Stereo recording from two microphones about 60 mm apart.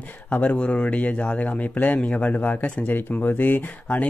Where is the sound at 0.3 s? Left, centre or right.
Left.